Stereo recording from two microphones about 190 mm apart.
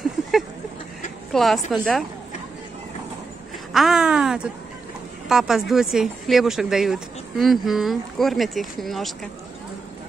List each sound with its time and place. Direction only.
1.3 s a woman's voice: centre (ahead or behind)
3.7 s speech: centre (ahead or behind)